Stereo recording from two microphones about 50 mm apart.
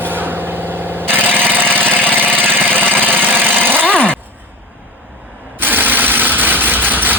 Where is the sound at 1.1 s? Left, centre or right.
Right.